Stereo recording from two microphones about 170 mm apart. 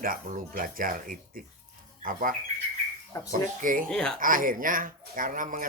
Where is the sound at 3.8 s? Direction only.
5° left (ahead or behind).